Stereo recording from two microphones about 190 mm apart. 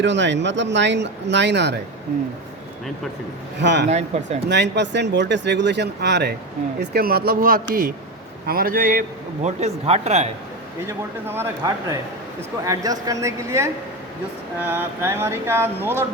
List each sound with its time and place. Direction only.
0.0 s speech: 70° right (ahead or behind)
3.6 s speech: 65° right (ahead or behind)
3.8 s a man's voice: 35° right (ahead or behind)
4.4 s a man's voice: 65° right (ahead or behind); by 10.2 s 35° right (ahead or behind)
10.8 s a sound: 15° right (ahead or behind)